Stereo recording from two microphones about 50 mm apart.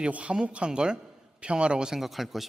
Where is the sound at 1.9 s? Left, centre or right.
Centre.